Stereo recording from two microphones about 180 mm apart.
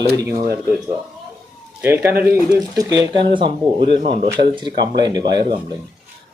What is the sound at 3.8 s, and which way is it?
Speech, 40° left (ahead or behind).